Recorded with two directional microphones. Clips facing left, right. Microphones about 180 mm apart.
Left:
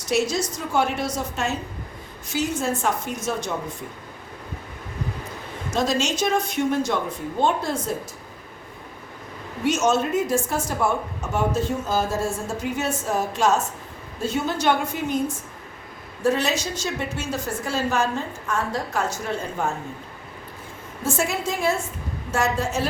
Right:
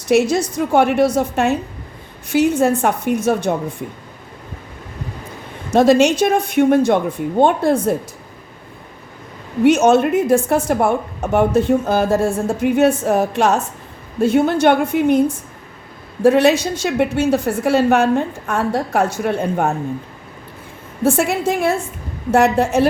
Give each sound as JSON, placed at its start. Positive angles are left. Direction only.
{"t": 0.1, "sound": "a woman's voice", "side_deg": -60}
{"t": 5.7, "sound": "a woman's voice", "side_deg": -60}
{"t": 9.6, "sound": "a woman's voice", "side_deg": -60}
{"t": 16.2, "sound": "a woman's voice", "side_deg": -60}
{"t": 21.0, "sound": "a woman's voice", "side_deg": -60}